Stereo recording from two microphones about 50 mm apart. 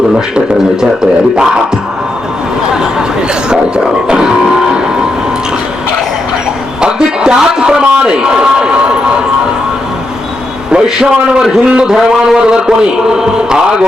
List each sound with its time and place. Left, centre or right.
4.1 s music: centre
6.8 s a sound: centre
10.7 s a man's voice: centre